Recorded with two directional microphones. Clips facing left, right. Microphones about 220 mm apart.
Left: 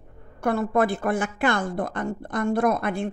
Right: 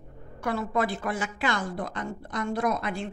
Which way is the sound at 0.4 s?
50° left (ahead or behind).